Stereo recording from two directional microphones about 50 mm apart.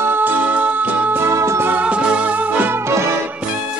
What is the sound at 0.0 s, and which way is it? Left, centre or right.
Music, right.